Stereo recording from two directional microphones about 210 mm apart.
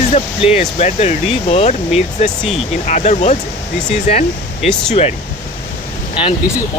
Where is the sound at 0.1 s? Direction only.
30° left (ahead or behind).